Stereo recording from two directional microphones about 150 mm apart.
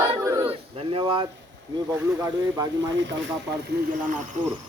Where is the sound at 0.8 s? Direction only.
35° right (ahead or behind).